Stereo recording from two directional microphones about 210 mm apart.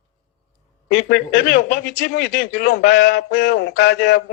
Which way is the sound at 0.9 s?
50° left (ahead or behind).